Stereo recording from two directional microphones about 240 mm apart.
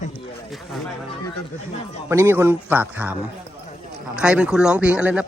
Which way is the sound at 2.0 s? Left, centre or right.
Centre.